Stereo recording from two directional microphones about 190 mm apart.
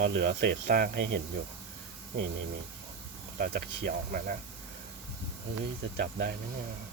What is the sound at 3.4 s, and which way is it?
Speech, 50° right (ahead or behind).